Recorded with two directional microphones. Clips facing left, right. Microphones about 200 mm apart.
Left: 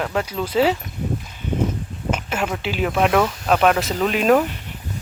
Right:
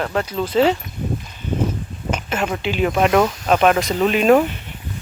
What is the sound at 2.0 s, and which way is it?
Speech, 5° left (ahead or behind).